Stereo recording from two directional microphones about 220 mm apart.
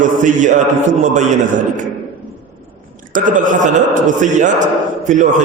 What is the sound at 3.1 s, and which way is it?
Mantra, 35° right (ahead or behind).